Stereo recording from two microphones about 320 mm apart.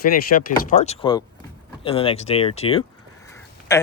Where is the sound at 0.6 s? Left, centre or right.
Left.